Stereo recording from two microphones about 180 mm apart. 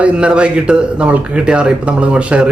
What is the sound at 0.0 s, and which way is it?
A man's voice, 5° right (ahead or behind).